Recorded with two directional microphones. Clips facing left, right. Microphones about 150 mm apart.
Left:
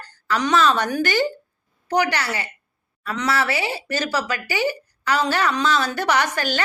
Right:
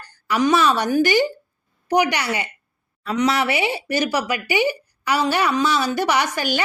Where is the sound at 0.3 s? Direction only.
10° right (ahead or behind).